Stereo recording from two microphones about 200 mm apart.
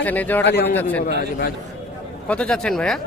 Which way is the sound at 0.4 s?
55° left (ahead or behind).